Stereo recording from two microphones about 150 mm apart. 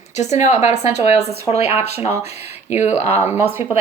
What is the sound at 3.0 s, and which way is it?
Speech, 45° left (ahead or behind).